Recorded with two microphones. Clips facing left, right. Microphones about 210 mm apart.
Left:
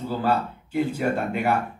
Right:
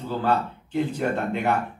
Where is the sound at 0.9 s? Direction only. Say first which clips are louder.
Left 1 dB; 10° left (ahead or behind).